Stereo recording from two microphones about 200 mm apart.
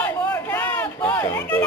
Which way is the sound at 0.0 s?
10° left (ahead or behind).